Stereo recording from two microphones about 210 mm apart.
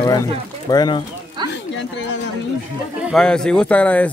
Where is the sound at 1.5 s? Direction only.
55° left (ahead or behind).